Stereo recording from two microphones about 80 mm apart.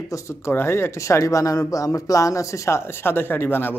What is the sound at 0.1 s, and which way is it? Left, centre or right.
Speech, left.